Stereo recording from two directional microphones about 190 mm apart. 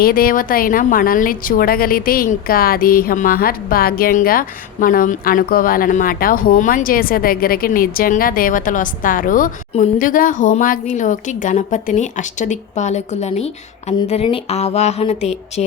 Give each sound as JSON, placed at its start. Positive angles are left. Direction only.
{"t": 0.0, "sound": "a woman's voice", "side_deg": 50}